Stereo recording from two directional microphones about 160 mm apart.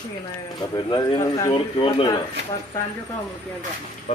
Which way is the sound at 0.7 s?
25° left (ahead or behind).